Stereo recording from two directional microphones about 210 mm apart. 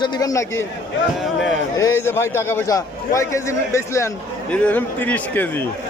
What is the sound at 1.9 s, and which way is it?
A man's voice, 10° left (ahead or behind).